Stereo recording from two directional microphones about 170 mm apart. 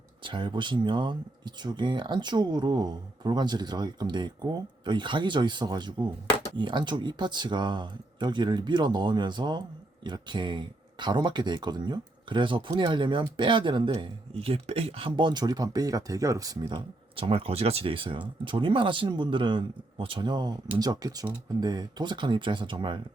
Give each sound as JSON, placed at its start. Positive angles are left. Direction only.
{"t": 0.2, "sound": "speech", "side_deg": -30}